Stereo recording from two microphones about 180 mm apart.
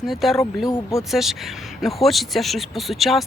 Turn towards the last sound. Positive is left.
turn(degrees=0)  # may be behind; listen again after turning